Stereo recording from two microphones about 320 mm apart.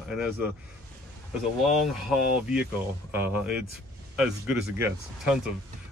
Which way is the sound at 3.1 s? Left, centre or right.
Centre.